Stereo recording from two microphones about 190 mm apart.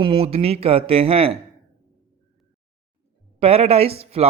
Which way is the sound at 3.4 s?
30° right (ahead or behind).